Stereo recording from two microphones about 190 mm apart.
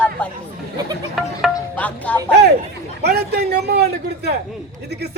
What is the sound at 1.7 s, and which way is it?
Speech, 5° left (ahead or behind).